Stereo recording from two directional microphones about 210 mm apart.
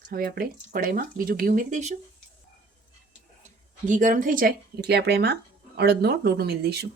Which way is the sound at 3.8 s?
35° right (ahead or behind).